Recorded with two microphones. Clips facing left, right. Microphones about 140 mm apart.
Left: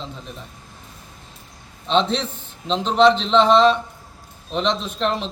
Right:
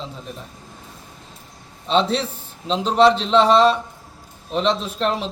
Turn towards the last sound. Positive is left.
turn(degrees=-5)  # may be behind; listen again after turning